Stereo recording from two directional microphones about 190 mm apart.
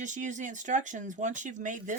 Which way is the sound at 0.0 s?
40° right (ahead or behind).